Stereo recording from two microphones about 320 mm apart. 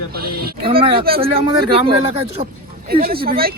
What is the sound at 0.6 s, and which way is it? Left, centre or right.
Speech, centre.